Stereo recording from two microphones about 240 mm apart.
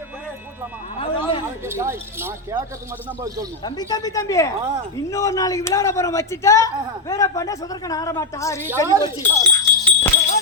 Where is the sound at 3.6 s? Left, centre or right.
Centre.